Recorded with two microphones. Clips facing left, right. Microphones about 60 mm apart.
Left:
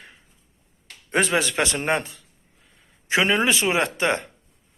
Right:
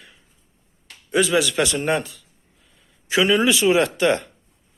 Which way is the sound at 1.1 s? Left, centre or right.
Left.